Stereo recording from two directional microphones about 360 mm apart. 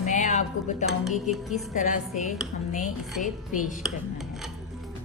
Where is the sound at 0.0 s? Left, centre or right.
Centre.